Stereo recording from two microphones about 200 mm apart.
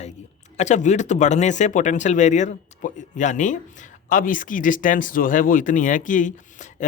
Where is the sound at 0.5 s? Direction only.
35° left (ahead or behind).